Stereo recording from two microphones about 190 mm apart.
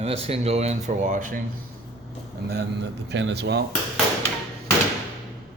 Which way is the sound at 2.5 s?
65° right (ahead or behind).